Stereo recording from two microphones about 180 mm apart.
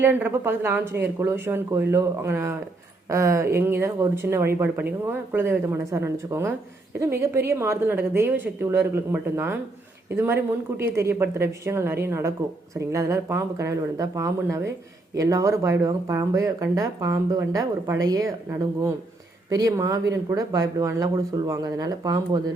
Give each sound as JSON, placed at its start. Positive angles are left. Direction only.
{"t": 0.0, "sound": "speech", "side_deg": -10}
{"t": 19.5, "sound": "speech", "side_deg": -20}